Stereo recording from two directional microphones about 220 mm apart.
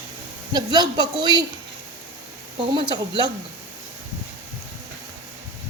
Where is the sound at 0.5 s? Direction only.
20° right (ahead or behind).